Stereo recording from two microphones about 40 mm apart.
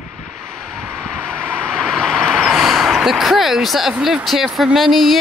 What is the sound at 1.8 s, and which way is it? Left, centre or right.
Vehicle, centre.